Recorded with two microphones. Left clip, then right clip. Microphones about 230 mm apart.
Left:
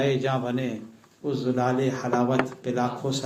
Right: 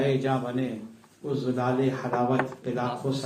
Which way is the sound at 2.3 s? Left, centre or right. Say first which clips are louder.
Left 2 dB; left.